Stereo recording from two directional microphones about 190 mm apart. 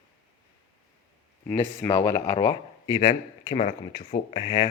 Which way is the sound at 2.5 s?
25° left (ahead or behind).